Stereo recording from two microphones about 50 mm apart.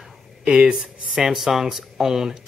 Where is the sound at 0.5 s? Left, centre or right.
Centre.